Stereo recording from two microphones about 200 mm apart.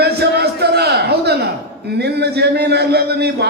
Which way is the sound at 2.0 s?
55° right (ahead or behind).